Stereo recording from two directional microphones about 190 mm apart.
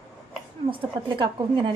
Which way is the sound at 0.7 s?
25° right (ahead or behind).